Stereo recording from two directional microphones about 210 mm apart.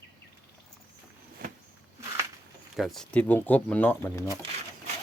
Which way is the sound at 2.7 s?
Centre (ahead or behind).